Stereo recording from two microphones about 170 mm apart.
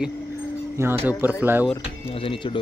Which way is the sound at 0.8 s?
15° right (ahead or behind).